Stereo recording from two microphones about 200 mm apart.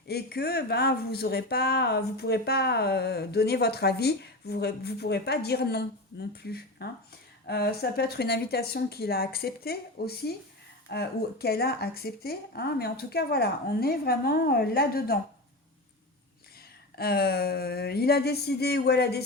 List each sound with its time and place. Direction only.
0.1 s speech: 50° left (ahead or behind)
17.0 s speech: 50° left (ahead or behind)